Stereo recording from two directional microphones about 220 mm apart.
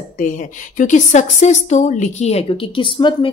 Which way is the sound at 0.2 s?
35° left (ahead or behind).